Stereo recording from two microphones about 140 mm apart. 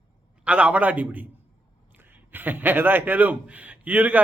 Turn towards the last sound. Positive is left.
turn(degrees=-10)  # may be behind; listen again after turning